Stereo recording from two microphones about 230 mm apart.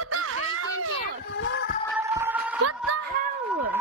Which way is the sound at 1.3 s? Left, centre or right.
Left.